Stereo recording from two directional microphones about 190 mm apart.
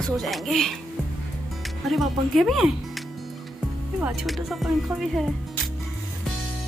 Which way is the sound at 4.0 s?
Centre (ahead or behind).